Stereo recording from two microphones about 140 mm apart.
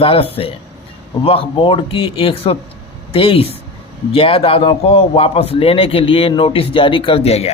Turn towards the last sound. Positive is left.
turn(degrees=45)  # may be behind; listen again after turning